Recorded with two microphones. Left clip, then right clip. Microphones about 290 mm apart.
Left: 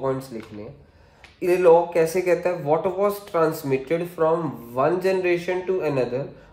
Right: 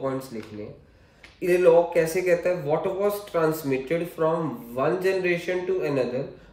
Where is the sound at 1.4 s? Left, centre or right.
Centre.